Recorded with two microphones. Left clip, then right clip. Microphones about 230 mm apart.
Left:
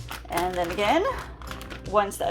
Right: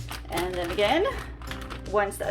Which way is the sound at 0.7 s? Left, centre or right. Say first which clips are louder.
Right 1 dB; left.